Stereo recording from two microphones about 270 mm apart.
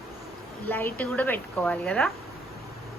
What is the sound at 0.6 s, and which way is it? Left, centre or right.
A woman's voice, centre.